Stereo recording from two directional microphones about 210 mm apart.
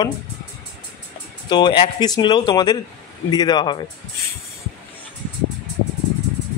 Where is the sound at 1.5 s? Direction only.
20° left (ahead or behind).